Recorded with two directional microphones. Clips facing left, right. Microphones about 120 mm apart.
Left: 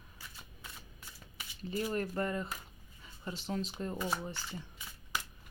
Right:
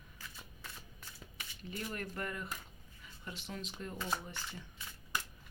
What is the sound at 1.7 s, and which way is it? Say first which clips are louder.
Speech: left 8 dB; 35° left (ahead or behind).